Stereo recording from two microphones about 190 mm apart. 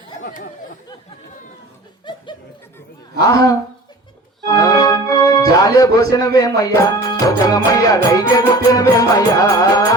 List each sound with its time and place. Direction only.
3.2 s speech: 20° left (ahead or behind)
4.4 s music: 20° left (ahead or behind)